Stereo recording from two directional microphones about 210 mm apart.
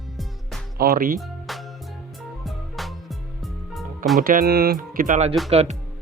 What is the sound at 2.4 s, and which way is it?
Music, centre (ahead or behind).